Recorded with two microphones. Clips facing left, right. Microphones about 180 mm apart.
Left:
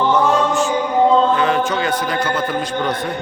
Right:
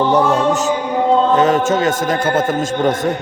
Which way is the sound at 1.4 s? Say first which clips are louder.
Right 4 dB; 40° right (ahead or behind).